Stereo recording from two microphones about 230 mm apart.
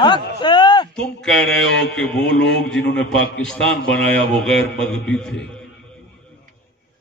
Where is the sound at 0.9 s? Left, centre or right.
Centre.